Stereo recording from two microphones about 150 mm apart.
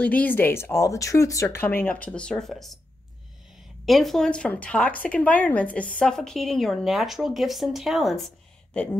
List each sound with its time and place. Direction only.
0.0 s speech: 10° left (ahead or behind)
3.8 s speech: centre (ahead or behind)